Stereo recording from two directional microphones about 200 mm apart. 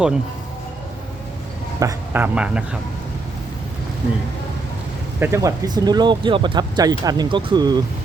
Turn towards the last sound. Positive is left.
turn(degrees=-20)  # may be behind; listen again after turning